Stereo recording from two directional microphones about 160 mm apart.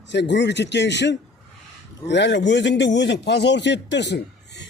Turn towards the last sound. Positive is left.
turn(degrees=90)